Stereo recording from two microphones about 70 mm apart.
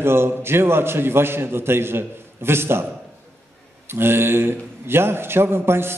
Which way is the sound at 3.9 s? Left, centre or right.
Right.